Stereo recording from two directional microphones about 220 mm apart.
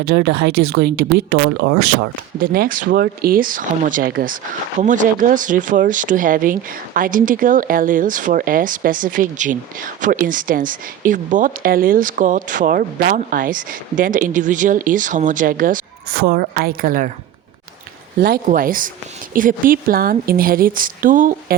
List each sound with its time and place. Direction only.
1.1 s speech: 50° right (ahead or behind)
18.2 s speech: 40° right (ahead or behind)